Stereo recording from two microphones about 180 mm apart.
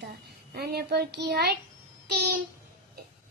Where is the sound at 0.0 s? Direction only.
60° right (ahead or behind).